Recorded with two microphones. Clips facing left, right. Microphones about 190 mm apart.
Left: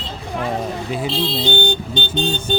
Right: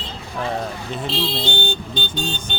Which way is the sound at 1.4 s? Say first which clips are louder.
Left 5 dB; 20° left (ahead or behind).